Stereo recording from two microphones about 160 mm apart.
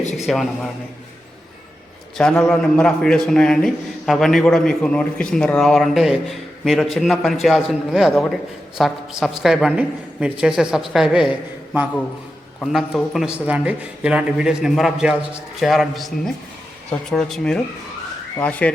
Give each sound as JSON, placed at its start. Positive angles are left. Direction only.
{"t": 0.0, "sound": "a sound", "side_deg": 45}
{"t": 0.3, "sound": "a man's voice", "side_deg": 0}
{"t": 2.1, "sound": "a man's voice", "side_deg": 5}
{"t": 18.3, "sound": "car alarm", "side_deg": 10}